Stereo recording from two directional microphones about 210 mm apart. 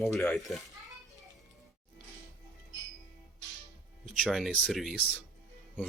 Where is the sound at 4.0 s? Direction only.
Centre (ahead or behind).